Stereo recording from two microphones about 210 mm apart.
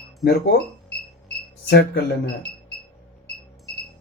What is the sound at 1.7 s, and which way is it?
Speech, 50° left (ahead or behind).